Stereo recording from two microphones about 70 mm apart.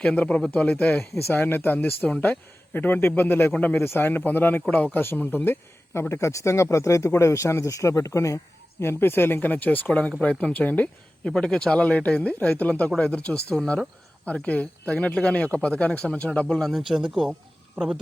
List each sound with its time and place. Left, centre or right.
0.0 s speech: centre
2.0 s speech: centre
2.2 s speech: left
8.8 s speech: left
11.3 s speech: centre
16.6 s speech: centre